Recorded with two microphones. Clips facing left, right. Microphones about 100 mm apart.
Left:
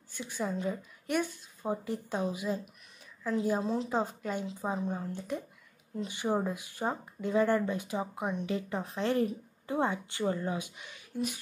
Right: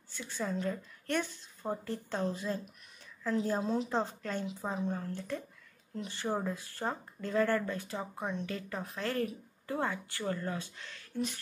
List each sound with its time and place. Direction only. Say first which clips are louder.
0.1 s a woman's voice: left 2 dB; 15° left (ahead or behind)